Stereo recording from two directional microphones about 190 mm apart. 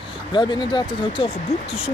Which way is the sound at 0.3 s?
25° left (ahead or behind).